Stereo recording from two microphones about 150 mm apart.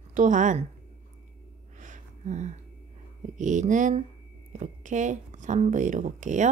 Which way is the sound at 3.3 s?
55° right (ahead or behind).